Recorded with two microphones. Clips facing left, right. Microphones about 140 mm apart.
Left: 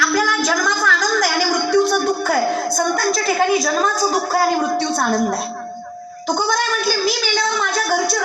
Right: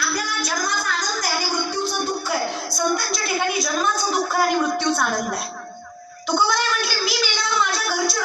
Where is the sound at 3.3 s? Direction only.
40° left (ahead or behind).